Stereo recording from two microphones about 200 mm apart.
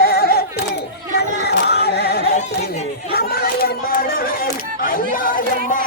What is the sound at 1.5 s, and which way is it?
Singing, 55° left (ahead or behind).